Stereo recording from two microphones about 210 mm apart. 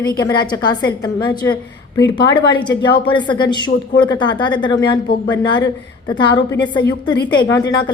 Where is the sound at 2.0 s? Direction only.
20° left (ahead or behind).